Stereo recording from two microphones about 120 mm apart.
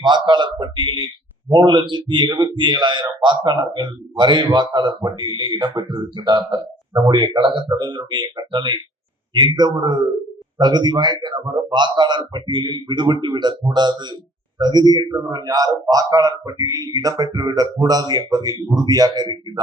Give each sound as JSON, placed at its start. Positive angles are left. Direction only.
{"t": 0.0, "sound": "a man's voice", "side_deg": -40}